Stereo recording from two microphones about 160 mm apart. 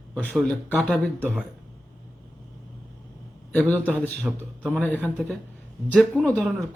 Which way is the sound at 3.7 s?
10° left (ahead or behind).